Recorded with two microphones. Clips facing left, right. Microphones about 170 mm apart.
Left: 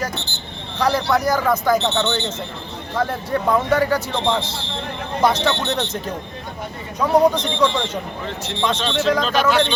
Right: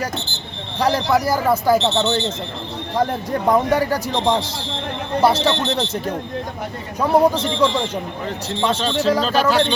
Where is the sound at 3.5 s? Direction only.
15° right (ahead or behind).